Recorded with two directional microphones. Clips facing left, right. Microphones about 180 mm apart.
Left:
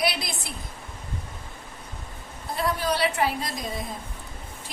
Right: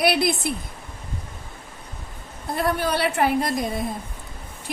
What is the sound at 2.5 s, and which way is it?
A woman's voice, 60° right (ahead or behind).